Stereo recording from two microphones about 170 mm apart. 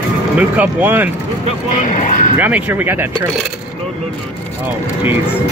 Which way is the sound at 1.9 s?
50° left (ahead or behind).